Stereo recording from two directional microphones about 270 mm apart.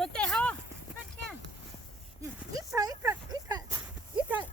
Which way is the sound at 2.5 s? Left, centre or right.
Centre.